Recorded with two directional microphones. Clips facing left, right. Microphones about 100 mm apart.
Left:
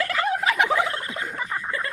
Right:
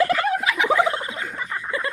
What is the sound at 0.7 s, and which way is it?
Turkey, 20° right (ahead or behind).